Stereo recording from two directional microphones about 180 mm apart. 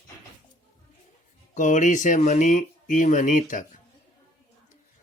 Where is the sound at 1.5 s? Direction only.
45° left (ahead or behind).